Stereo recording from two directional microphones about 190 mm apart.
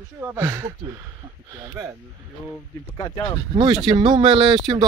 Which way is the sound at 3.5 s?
25° right (ahead or behind).